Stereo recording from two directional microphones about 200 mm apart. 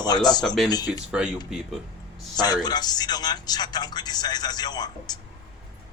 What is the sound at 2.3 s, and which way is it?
Speech, 20° left (ahead or behind).